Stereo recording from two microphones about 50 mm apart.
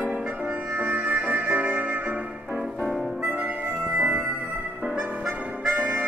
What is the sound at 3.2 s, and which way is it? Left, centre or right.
Clarinet, right.